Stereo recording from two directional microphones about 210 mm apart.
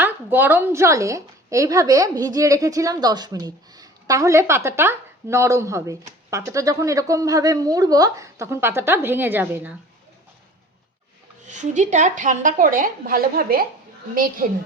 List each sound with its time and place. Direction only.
0.0 s a woman's voice: 10° right (ahead or behind)
11.4 s a woman's voice: 35° right (ahead or behind)